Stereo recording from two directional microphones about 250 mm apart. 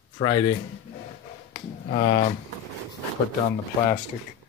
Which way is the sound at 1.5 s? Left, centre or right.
Left.